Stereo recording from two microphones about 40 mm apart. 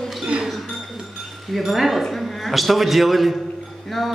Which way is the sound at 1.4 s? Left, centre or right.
Centre.